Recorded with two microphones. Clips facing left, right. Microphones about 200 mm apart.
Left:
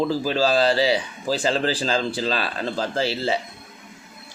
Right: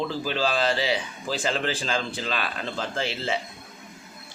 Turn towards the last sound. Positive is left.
turn(degrees=35)  # may be behind; listen again after turning